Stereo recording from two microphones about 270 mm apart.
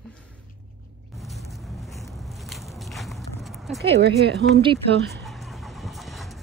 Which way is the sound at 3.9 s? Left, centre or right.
Right.